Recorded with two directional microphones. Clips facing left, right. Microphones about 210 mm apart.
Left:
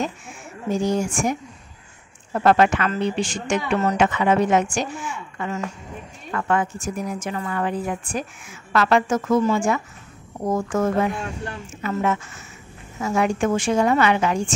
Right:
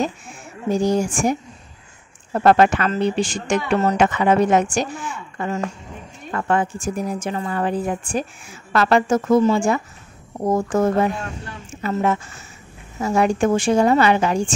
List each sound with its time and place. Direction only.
0.0 s a woman's voice: 35° right (ahead or behind)
13.0 s a woman's voice: 35° right (ahead or behind)